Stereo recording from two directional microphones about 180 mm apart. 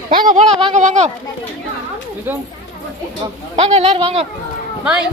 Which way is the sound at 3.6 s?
35° right (ahead or behind).